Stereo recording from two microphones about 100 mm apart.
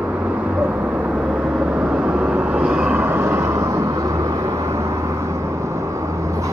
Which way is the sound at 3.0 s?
25° right (ahead or behind).